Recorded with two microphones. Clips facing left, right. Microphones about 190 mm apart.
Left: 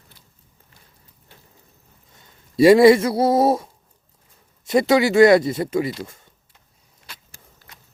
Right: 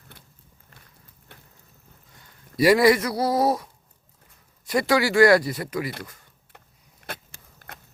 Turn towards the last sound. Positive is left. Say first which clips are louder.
# right 4 dB
turn(degrees=-55)  # may be behind; listen again after turning